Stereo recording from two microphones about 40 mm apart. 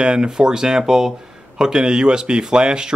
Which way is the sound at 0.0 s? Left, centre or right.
Right.